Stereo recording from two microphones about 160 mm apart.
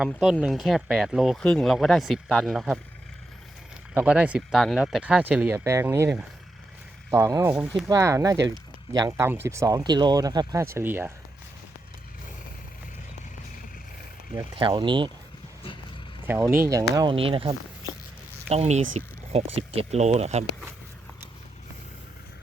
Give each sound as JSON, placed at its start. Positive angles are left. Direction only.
{"t": 0.0, "sound": "speech", "side_deg": -5}
{"t": 3.9, "sound": "speech", "side_deg": -5}
{"t": 14.5, "sound": "speech", "side_deg": -30}
{"t": 16.2, "sound": "speech", "side_deg": -15}
{"t": 17.2, "sound": "speech", "side_deg": -35}